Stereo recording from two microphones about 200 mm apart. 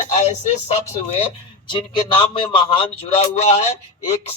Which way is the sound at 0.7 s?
30° left (ahead or behind).